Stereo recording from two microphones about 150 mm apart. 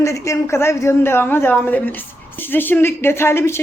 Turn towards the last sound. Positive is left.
turn(degrees=15)  # may be behind; listen again after turning